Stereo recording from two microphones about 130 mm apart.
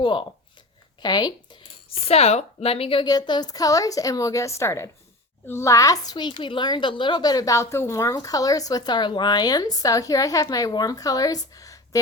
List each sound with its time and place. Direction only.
0.0 s speech: 40° left (ahead or behind)
2.0 s speech: 55° left (ahead or behind)
3.1 s a woman's voice: 30° left (ahead or behind)